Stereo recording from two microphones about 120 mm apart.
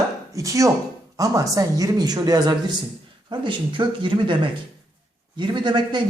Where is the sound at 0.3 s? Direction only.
25° right (ahead or behind).